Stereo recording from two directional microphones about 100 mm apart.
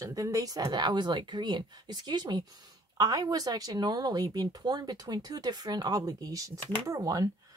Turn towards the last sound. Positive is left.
turn(degrees=-35)  # may be behind; listen again after turning